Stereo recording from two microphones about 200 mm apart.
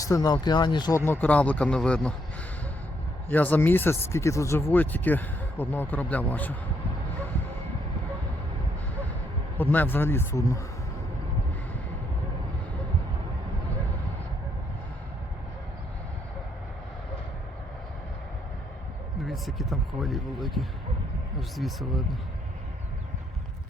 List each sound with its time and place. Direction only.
0.0 s speech: 20° left (ahead or behind)
3.2 s speech: 10° left (ahead or behind)
9.6 s speech: 10° left (ahead or behind)
19.3 s speech: centre (ahead or behind)